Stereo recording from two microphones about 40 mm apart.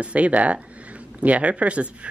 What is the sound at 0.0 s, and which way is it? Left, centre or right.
Speech, right.